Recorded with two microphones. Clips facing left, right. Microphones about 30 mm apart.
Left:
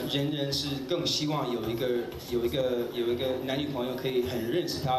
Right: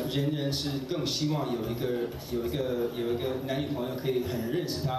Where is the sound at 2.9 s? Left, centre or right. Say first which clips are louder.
Left 2 dB; left.